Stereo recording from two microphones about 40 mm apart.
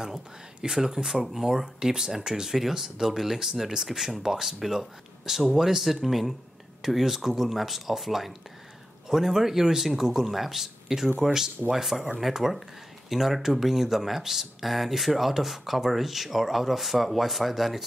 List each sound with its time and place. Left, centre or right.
0.0 s speech: centre